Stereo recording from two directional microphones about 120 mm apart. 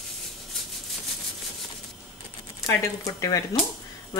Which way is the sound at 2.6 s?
25° left (ahead or behind).